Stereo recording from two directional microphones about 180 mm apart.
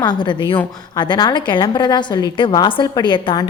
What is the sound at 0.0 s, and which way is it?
A woman's voice, 25° left (ahead or behind).